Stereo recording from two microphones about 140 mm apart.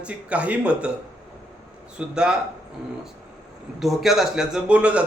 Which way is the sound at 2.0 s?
5° right (ahead or behind).